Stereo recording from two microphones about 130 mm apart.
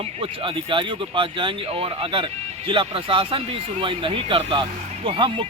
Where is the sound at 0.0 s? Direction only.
45° right (ahead or behind).